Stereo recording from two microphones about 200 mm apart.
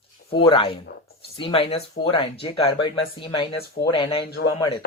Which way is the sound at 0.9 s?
50° left (ahead or behind).